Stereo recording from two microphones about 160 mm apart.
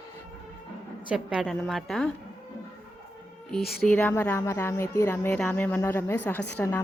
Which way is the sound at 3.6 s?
75° left (ahead or behind).